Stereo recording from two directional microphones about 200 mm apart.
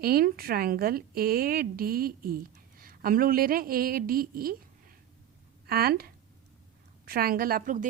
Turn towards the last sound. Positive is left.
turn(degrees=-45)  # may be behind; listen again after turning